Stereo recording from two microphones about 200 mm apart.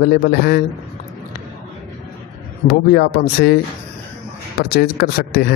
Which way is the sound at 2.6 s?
50° left (ahead or behind).